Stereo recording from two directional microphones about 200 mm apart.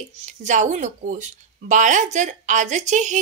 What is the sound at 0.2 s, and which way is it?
Speech, 35° right (ahead or behind).